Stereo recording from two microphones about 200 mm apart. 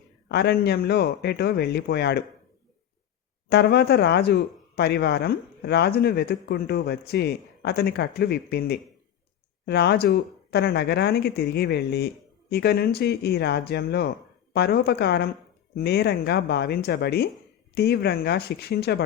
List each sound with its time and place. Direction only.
0.3 s speech: 55° left (ahead or behind)
3.5 s speech: 55° left (ahead or behind)